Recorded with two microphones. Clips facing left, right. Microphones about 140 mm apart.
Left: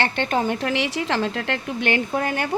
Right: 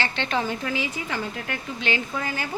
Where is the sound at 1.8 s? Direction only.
55° left (ahead or behind).